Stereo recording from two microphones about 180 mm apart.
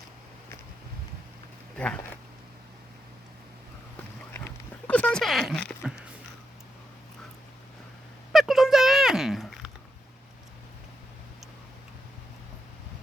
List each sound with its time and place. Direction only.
1.7 s speech: 5° left (ahead or behind)
4.9 s a sound: 5° left (ahead or behind)
8.3 s cat: centre (ahead or behind)